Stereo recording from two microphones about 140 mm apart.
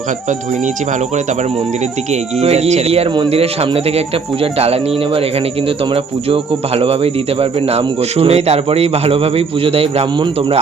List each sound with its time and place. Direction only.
2.4 s speech: 50° right (ahead or behind)